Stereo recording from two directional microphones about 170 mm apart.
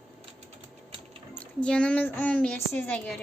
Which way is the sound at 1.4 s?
5° left (ahead or behind).